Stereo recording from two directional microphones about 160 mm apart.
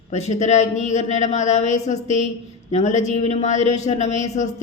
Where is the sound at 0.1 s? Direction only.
45° left (ahead or behind).